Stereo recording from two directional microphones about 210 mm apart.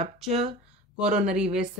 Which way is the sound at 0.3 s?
30° right (ahead or behind).